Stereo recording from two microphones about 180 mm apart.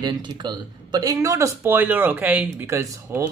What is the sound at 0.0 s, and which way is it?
Speech, 25° right (ahead or behind).